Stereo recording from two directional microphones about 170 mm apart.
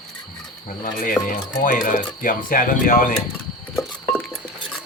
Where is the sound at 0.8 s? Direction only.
55° left (ahead or behind).